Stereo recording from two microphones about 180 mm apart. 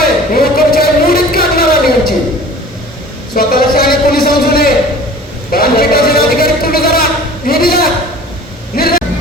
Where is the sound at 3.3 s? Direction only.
55° left (ahead or behind).